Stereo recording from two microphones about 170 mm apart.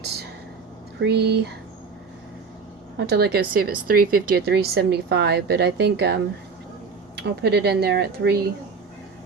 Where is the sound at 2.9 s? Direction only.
75° right (ahead or behind).